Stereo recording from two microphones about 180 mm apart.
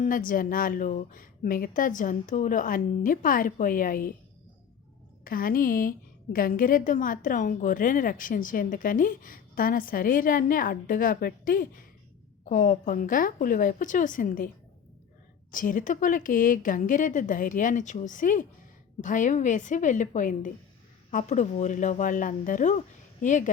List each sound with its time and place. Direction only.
0.0 s a woman's voice: 50° left (ahead or behind)
5.2 s a woman's voice: 55° left (ahead or behind)
15.5 s a woman's voice: 50° left (ahead or behind)